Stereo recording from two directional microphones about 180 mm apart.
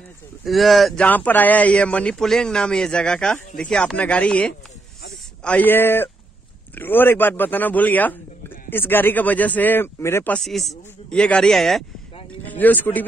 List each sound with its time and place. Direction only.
0.5 s speech: centre (ahead or behind)